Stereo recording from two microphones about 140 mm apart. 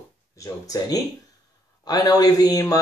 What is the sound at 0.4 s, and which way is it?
Speech, 25° left (ahead or behind).